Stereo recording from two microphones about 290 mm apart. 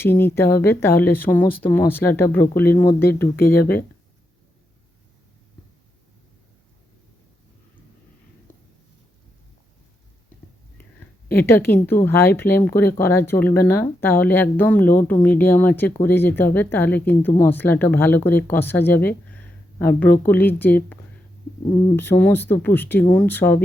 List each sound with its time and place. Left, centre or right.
0.0 s speech: centre
3.3 s speech: left
11.3 s speech: centre